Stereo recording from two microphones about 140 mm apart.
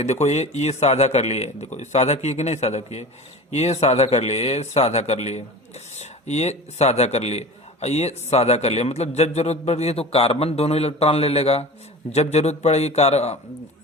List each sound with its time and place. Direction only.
0.0 s a man's voice: 50° left (ahead or behind)